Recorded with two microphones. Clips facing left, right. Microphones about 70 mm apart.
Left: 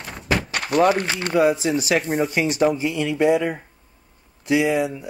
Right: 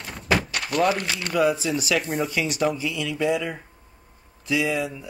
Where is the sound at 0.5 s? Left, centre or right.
Left.